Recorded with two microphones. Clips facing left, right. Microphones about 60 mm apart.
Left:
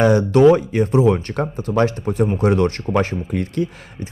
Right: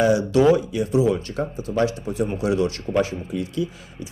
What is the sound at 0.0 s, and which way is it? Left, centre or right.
Speech, left.